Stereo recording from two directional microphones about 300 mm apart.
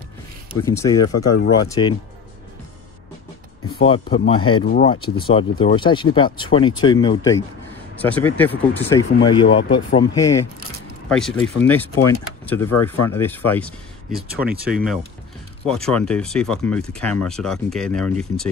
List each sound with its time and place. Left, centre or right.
0.7 s speech: centre
1.1 s speech: left
1.6 s speech: centre
3.8 s speech: centre
4.6 s speech: left
5.3 s speech: centre